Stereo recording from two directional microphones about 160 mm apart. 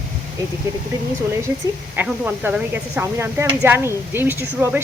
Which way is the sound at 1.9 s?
10° right (ahead or behind).